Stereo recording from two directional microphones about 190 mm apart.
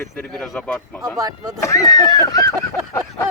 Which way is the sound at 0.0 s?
5° left (ahead or behind).